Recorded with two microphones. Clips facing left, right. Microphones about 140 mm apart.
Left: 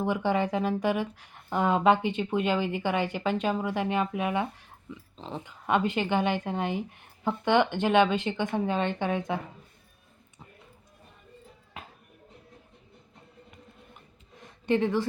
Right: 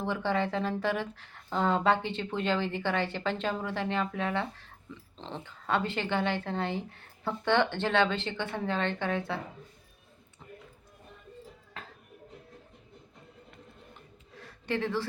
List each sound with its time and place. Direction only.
0.0 s speech: 15° left (ahead or behind)
5.1 s speech: 5° left (ahead or behind)
5.4 s speech: 15° left (ahead or behind)
11.8 s music: 10° left (ahead or behind)
14.3 s a sound: 20° left (ahead or behind)